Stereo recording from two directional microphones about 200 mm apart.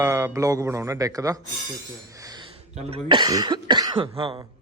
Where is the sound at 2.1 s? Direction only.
15° right (ahead or behind).